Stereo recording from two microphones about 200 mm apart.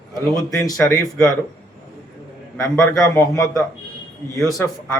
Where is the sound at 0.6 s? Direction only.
15° left (ahead or behind).